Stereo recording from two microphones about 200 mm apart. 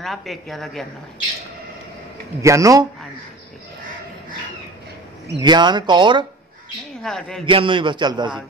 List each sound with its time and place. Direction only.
0.0 s a woman's voice: centre (ahead or behind)
2.4 s a man's voice: 15° right (ahead or behind)
5.4 s speech: 20° right (ahead or behind)
7.0 s a woman's voice: 5° left (ahead or behind)
7.4 s speech: 25° right (ahead or behind)